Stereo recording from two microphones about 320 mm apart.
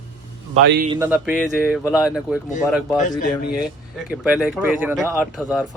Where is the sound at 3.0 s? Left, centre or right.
Left.